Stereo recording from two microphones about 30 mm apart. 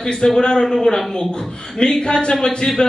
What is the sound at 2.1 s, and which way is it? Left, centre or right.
Speech, left.